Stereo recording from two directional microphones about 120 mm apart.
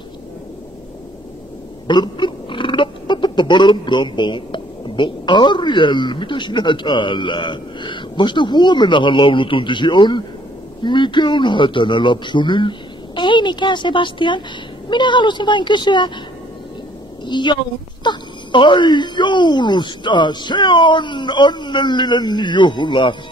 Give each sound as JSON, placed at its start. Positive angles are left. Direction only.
{"t": 1.9, "sound": "speech", "side_deg": 40}
{"t": 17.2, "sound": "a woman's voice", "side_deg": 40}